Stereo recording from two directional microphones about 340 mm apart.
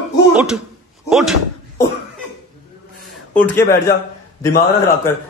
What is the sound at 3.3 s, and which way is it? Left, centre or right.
Speech, centre.